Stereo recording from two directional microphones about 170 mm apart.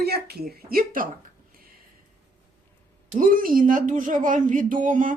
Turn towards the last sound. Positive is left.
turn(degrees=-50)  # may be behind; listen again after turning